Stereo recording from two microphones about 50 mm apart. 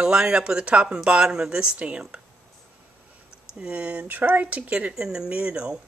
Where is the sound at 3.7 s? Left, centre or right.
Right.